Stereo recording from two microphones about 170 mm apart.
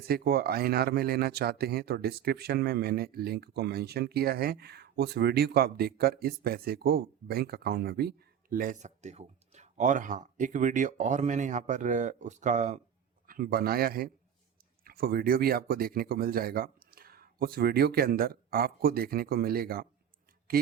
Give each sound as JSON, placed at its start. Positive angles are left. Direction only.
{"t": 0.0, "sound": "speech", "side_deg": -65}
{"t": 13.2, "sound": "speech", "side_deg": -60}